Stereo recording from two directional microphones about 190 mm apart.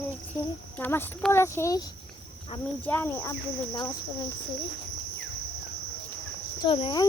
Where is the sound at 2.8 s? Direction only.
10° left (ahead or behind).